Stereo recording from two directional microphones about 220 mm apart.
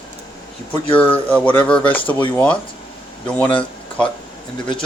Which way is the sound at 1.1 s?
5° left (ahead or behind).